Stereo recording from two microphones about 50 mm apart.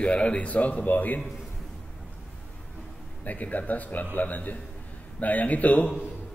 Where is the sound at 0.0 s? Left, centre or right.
Left.